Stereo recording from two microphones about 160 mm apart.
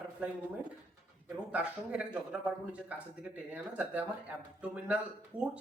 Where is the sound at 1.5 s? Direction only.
10° right (ahead or behind).